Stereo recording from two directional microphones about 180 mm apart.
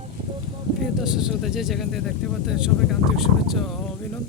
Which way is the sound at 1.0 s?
5° right (ahead or behind).